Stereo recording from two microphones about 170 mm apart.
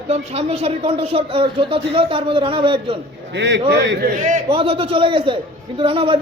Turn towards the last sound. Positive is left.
turn(degrees=-30)  # may be behind; listen again after turning